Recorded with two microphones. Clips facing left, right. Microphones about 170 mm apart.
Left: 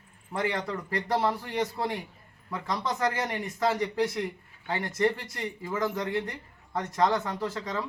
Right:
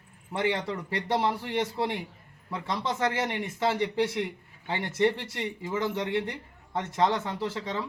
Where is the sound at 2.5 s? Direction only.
25° right (ahead or behind).